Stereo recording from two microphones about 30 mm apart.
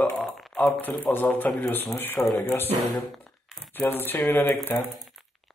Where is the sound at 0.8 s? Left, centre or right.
Left.